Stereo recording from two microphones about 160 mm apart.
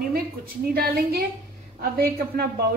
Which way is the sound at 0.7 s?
70° right (ahead or behind).